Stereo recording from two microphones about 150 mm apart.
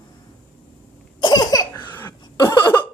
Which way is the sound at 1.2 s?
25° left (ahead or behind).